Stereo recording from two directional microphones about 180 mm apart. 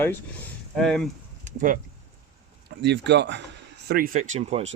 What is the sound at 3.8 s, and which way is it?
Speech, 55° right (ahead or behind).